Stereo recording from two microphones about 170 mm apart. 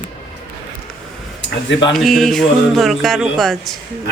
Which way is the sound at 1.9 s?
Centre (ahead or behind).